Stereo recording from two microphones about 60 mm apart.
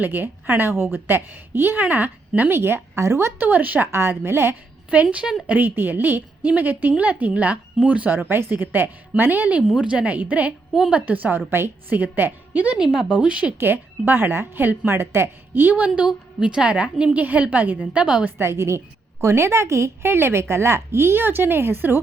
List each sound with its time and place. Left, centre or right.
0.0 s a woman's voice: right
2.6 s a woman's voice: right
3.3 s a woman's voice: right
4.1 s a woman's voice: right
4.9 s a woman's voice: right
8.2 s a woman's voice: right
9.7 s a woman's voice: centre
12.7 s a woman's voice: centre
13.6 s a woman's voice: right
16.0 s a woman's voice: centre
18.3 s a woman's voice: right